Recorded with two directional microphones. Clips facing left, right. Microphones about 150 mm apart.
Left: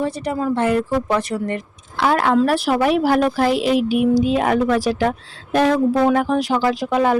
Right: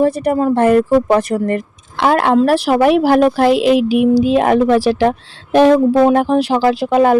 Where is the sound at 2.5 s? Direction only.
90° right.